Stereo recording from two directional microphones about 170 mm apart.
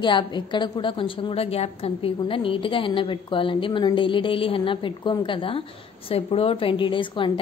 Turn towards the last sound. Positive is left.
turn(degrees=30)  # may be behind; listen again after turning